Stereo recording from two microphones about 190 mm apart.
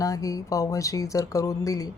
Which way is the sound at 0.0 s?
20° left (ahead or behind).